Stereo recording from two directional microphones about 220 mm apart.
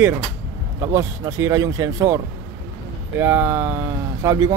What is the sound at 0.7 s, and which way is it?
Speech, 15° right (ahead or behind).